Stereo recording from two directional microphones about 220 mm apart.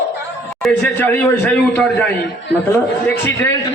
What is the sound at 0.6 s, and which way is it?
A man's voice, 5° left (ahead or behind).